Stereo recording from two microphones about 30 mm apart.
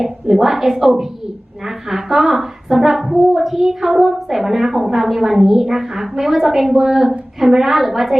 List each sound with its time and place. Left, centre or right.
0.0 s a woman's voice: centre